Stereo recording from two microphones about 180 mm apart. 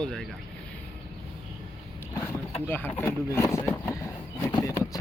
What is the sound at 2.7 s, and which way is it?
Speech, 10° left (ahead or behind).